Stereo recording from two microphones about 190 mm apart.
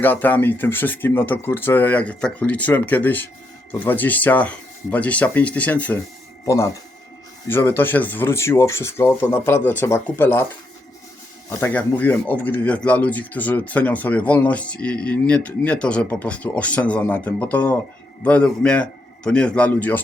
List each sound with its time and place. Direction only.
0.0 s speech: 10° left (ahead or behind)
11.4 s speech: 10° left (ahead or behind)